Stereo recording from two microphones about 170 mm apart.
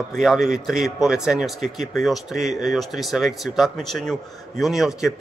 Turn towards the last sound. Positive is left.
turn(degrees=0)  # may be behind; listen again after turning